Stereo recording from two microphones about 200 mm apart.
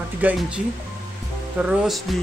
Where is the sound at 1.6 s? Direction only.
Centre (ahead or behind).